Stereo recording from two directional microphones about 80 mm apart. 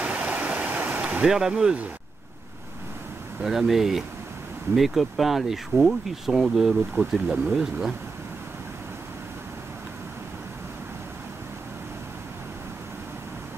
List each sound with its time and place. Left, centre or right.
0.0 s stream: centre
1.2 s speech: centre
3.4 s speech: centre